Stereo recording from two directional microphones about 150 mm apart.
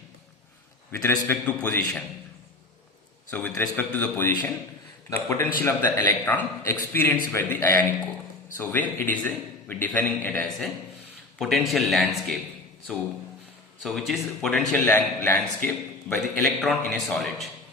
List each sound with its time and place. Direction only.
0.9 s a man's voice: 15° left (ahead or behind)
3.2 s a man's voice: 10° left (ahead or behind)
11.3 s a man's voice: centre (ahead or behind)
13.8 s a man's voice: centre (ahead or behind)
16.1 s a man's voice: centre (ahead or behind)